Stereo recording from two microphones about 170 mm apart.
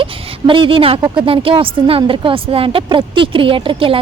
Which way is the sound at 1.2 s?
35° right (ahead or behind).